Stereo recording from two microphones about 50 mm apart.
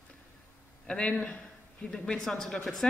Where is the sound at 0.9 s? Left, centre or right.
Centre.